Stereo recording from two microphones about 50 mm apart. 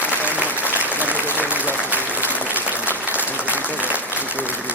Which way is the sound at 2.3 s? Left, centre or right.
Left.